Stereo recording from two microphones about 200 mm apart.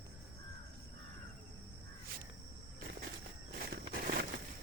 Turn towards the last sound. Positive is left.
turn(degrees=-50)  # may be behind; listen again after turning